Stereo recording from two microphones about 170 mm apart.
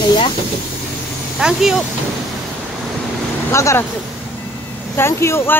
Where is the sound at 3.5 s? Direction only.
15° left (ahead or behind).